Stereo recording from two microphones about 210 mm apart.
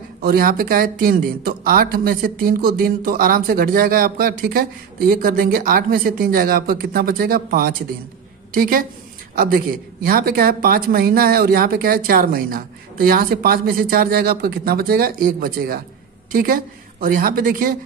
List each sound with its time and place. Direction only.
0.2 s a woman's voice: 45° right (ahead or behind)
10.0 s a woman's voice: 45° right (ahead or behind)